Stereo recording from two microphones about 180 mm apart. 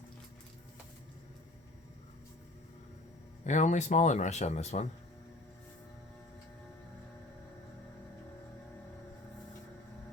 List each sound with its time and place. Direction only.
3.4 s a man's voice: 40° left (ahead or behind)